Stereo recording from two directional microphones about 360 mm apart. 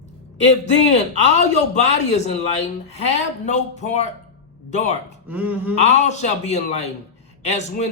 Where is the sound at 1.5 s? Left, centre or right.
Centre.